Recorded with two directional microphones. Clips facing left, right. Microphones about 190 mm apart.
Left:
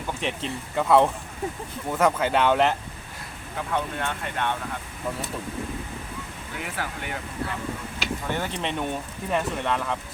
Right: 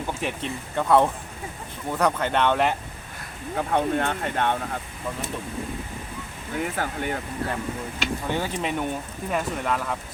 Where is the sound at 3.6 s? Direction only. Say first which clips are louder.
Right 5 dB; 45° right (ahead or behind).